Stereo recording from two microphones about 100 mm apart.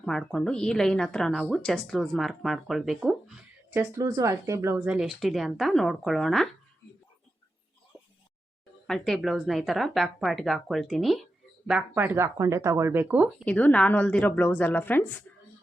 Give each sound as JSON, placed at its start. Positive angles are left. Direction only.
{"t": 0.0, "sound": "a woman's voice", "side_deg": 5}
{"t": 3.7, "sound": "speech", "side_deg": -25}
{"t": 4.9, "sound": "a woman's voice", "side_deg": -5}
{"t": 8.9, "sound": "a woman's voice", "side_deg": 5}
{"t": 11.9, "sound": "speech", "side_deg": -25}
{"t": 13.4, "sound": "a woman's voice", "side_deg": 15}